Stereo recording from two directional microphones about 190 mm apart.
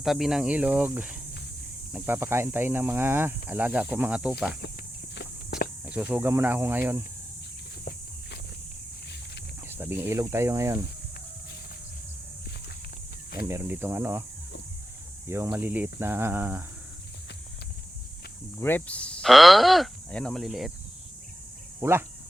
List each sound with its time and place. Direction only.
0.0 s speech: centre (ahead or behind)
5.8 s speech: 10° right (ahead or behind)
9.6 s speech: 10° right (ahead or behind)
13.4 s speech: 10° right (ahead or behind)
15.3 s speech: 15° right (ahead or behind)
18.5 s speech: 10° left (ahead or behind)
21.8 s speech: 15° right (ahead or behind)